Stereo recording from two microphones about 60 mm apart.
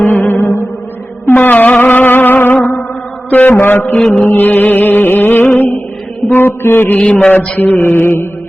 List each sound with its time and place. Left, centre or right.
0.0 s music: left
1.3 s a sound: left
3.2 s mantra: left
3.6 s music: left
3.9 s mantra: centre
4.3 s music: left
6.9 s mantra: centre
7.6 s music: left